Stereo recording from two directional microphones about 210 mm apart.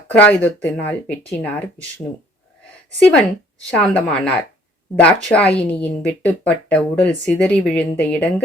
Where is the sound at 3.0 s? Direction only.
5° left (ahead or behind).